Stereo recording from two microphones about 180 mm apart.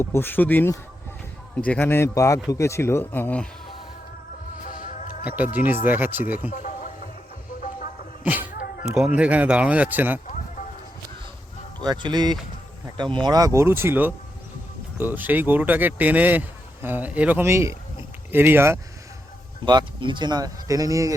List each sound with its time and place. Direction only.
0.0 s speech: 10° left (ahead or behind)
4.6 s music: 45° left (ahead or behind)
5.4 s speech: 10° right (ahead or behind)
6.5 s a sound: 45° left (ahead or behind)
8.2 s speech: 10° right (ahead or behind)
11.9 s speech: 25° right (ahead or behind)
19.6 s speech: 25° right (ahead or behind)